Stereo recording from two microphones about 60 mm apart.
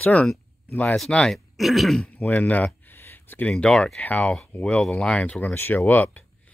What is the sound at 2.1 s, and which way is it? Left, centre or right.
Speech, left.